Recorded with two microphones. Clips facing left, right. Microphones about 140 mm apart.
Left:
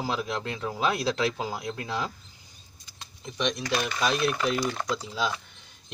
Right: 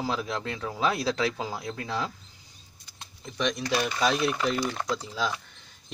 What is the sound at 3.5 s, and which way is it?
Speech, centre (ahead or behind).